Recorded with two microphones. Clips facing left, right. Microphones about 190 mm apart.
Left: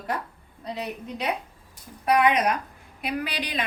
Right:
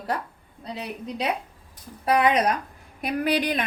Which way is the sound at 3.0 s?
50° right (ahead or behind).